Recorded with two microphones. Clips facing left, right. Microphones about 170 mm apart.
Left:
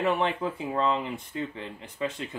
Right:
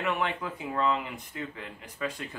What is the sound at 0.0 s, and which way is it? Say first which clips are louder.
Speech: left 4 dB; 30° left (ahead or behind).